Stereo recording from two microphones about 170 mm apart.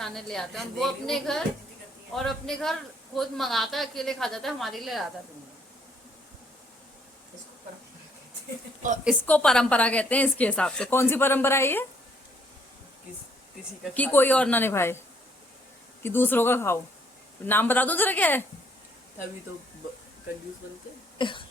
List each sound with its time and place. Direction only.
0.0 s a woman's voice: centre (ahead or behind)
9.2 s a woman's voice: 5° left (ahead or behind)
13.9 s a woman's voice: 10° left (ahead or behind)
16.0 s a woman's voice: 10° left (ahead or behind)
21.2 s cough: 30° left (ahead or behind)